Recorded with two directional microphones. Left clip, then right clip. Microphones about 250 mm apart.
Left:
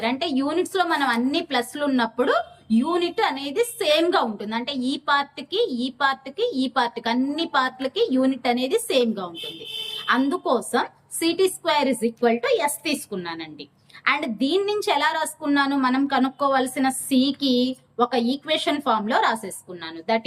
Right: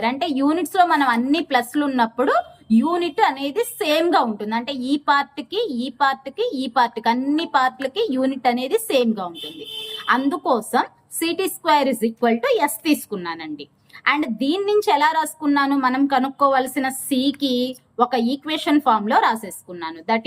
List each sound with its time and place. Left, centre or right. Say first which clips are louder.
0.0 s a woman's voice: right 3 dB; centre